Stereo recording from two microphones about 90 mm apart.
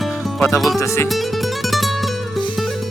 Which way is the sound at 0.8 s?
35° left (ahead or behind).